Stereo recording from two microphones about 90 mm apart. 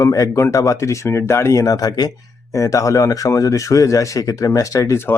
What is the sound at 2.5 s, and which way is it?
Speech, 35° left (ahead or behind).